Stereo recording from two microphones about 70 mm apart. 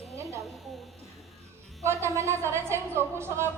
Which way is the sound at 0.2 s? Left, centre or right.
Right.